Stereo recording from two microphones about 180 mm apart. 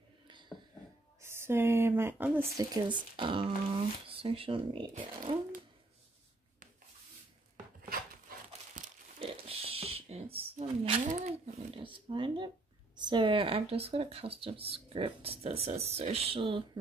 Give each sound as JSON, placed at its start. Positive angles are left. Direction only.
{"t": 1.2, "sound": "speech", "side_deg": -15}
{"t": 2.7, "sound": "speech", "side_deg": -25}
{"t": 5.3, "sound": "a sound", "side_deg": -30}
{"t": 7.9, "sound": "crumpling", "side_deg": -50}
{"t": 9.2, "sound": "zipper", "side_deg": -30}
{"t": 11.7, "sound": "a sound", "side_deg": -30}
{"t": 12.9, "sound": "speech", "side_deg": -25}